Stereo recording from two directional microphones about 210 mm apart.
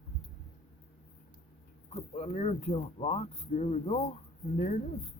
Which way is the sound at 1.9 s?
30° left (ahead or behind).